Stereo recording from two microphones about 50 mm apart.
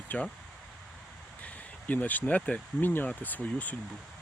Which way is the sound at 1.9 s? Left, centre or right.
Left.